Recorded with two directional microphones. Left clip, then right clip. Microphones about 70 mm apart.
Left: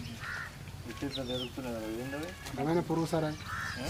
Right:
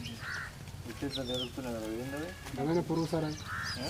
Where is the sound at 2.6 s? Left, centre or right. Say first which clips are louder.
Left 1 dB; left.